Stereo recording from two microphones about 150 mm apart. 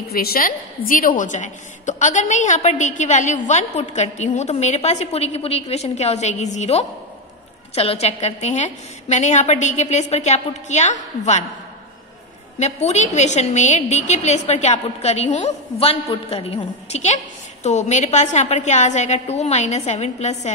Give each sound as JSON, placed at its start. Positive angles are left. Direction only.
{"t": 0.1, "sound": "a woman's voice", "side_deg": 80}
{"t": 12.5, "sound": "a woman's voice", "side_deg": 50}